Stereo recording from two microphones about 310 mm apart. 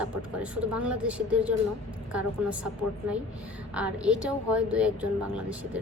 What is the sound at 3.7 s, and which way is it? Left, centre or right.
Speech, centre.